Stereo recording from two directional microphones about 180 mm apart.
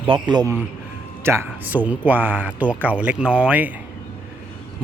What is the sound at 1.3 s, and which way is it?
Speech, 10° right (ahead or behind).